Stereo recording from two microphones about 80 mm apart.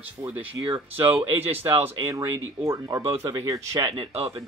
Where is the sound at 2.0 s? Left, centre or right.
Right.